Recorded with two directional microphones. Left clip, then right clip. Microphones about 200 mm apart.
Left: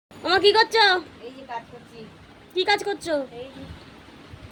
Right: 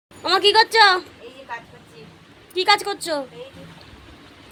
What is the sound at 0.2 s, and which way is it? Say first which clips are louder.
Speech: right 2 dB; 5° left (ahead or behind).